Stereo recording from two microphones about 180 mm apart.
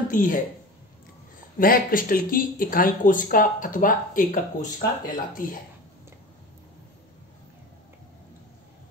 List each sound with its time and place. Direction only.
0.1 s speech: 50° left (ahead or behind)
1.6 s speech: 50° left (ahead or behind)